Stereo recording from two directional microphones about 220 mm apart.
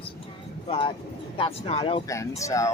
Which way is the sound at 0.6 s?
25° left (ahead or behind).